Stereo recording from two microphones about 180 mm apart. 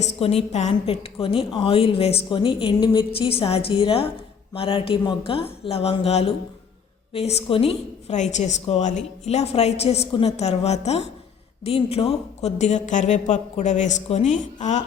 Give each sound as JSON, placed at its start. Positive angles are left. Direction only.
{"t": 0.0, "sound": "a woman's voice", "side_deg": 35}